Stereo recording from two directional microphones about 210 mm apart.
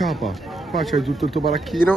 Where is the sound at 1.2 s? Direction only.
25° right (ahead or behind).